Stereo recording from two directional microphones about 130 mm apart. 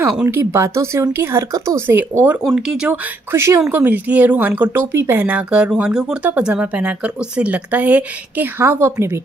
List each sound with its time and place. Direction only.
0.2 s speech: 20° right (ahead or behind)
2.4 s speech: centre (ahead or behind)
3.3 s speech: 20° right (ahead or behind)